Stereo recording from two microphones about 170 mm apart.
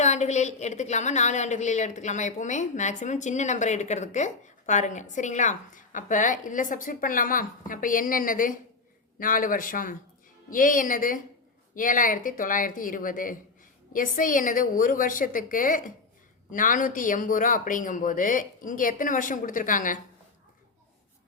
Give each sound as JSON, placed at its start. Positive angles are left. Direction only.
{"t": 0.0, "sound": "a woman's voice", "side_deg": 45}